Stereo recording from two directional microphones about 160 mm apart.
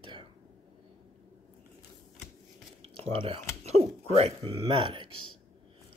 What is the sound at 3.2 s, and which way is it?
Speech, 35° right (ahead or behind).